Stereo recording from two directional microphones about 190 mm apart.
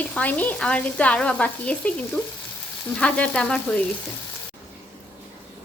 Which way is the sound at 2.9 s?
5° left (ahead or behind).